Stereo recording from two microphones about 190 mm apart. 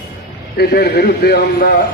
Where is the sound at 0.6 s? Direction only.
55° left (ahead or behind).